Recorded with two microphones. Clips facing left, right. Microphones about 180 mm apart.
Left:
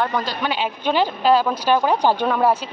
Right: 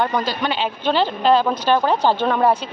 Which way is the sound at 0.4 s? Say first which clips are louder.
Right 1 dB; 10° left (ahead or behind).